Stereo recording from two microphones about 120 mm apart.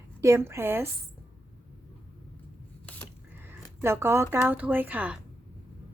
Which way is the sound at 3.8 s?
20° right (ahead or behind).